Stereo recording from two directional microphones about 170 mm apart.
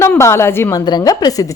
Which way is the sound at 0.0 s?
15° left (ahead or behind).